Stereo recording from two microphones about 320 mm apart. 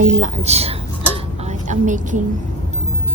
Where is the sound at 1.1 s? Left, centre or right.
Right.